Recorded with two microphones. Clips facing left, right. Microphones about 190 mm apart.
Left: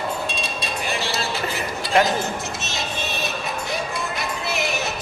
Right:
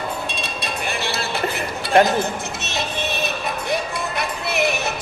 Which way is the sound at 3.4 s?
60° right (ahead or behind).